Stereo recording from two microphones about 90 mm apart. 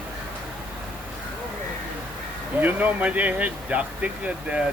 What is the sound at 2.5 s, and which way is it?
Speech, 20° right (ahead or behind).